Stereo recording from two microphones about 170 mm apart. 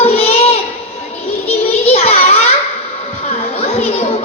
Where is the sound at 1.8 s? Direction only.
35° left (ahead or behind).